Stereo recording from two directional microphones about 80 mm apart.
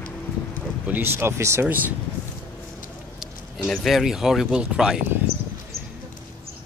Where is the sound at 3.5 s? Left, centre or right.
Centre.